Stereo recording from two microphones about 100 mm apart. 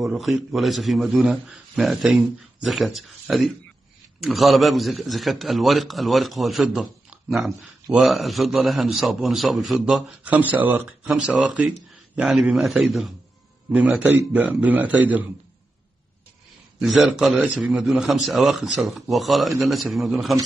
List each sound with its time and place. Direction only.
0.0 s a man's voice: centre (ahead or behind)
10.2 s a man's voice: 15° right (ahead or behind)
16.8 s a man's voice: centre (ahead or behind)